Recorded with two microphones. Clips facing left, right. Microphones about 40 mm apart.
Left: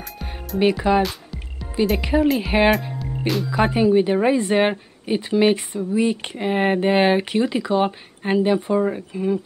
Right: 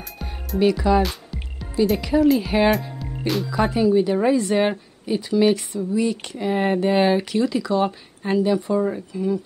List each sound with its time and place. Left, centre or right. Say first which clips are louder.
0.6 s a woman's voice: even; left
1.0 s music: left 1 dB; centre
2.0 s speech: right 2 dB; left
3.0 s music: left 1 dB; centre
3.5 s a woman's voice: left 2 dB; left